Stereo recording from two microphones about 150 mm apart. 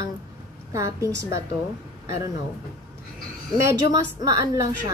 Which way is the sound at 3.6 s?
20° right (ahead or behind).